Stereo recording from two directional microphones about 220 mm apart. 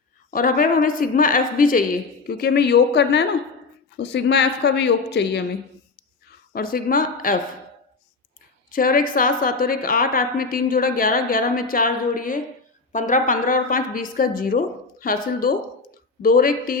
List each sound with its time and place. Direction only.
0.3 s a woman's voice: 40° left (ahead or behind)
6.5 s a woman's voice: 45° left (ahead or behind)
8.7 s a woman's voice: 40° left (ahead or behind)